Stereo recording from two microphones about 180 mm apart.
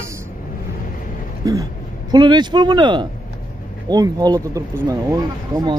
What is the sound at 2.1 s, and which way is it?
Speech, 25° right (ahead or behind).